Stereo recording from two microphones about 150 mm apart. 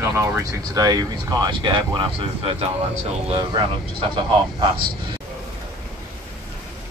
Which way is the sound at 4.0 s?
35° right (ahead or behind).